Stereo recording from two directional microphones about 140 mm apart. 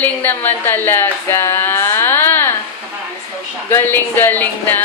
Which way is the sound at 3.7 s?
15° left (ahead or behind).